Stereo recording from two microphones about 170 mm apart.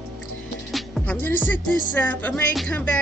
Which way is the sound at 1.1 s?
10° left (ahead or behind).